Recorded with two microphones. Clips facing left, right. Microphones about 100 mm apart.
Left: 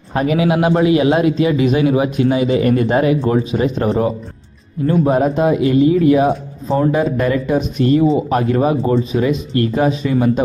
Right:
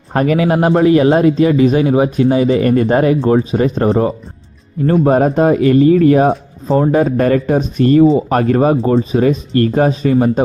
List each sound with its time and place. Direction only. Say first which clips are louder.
0.1 s speech: right 2 dB; 50° right (ahead or behind)
5.0 s speech: right 4 dB; 50° right (ahead or behind)